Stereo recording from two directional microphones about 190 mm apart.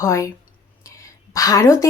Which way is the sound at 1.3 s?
20° left (ahead or behind).